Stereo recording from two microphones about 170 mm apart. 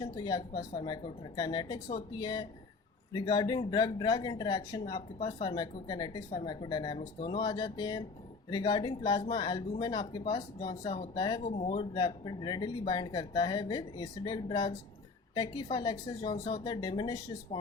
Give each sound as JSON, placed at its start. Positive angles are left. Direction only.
{"t": 0.0, "sound": "speech", "side_deg": 25}
{"t": 11.4, "sound": "speech", "side_deg": 40}